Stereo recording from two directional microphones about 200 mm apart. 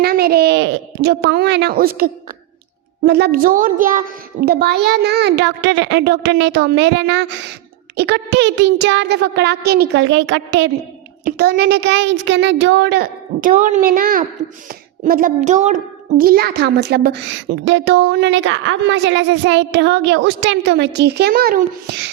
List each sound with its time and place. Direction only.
0.0 s a child's voice: 50° right (ahead or behind); by 10.7 s 65° right (ahead or behind)
11.3 s a child's voice: 50° right (ahead or behind)